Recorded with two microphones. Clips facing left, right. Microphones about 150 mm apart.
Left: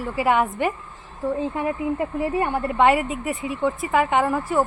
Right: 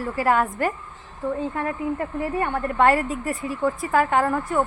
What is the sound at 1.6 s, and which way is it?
Speech, 15° left (ahead or behind).